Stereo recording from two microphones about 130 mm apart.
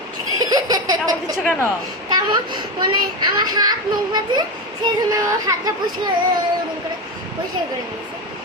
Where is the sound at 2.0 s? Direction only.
30° right (ahead or behind).